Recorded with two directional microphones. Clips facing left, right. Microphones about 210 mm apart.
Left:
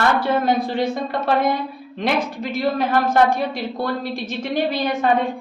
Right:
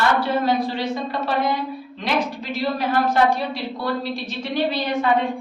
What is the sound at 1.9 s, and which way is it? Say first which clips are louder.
A woman's voice: left 2 dB; 55° left (ahead or behind).